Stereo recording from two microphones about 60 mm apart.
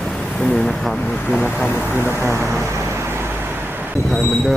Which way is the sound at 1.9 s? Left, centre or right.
Right.